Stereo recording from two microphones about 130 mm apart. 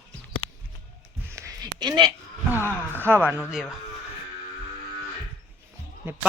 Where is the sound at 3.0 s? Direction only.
15° right (ahead or behind).